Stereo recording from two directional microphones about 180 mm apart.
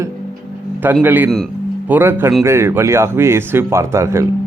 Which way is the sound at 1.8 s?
10° right (ahead or behind).